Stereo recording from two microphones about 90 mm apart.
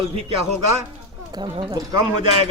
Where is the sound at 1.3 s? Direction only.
60° right (ahead or behind).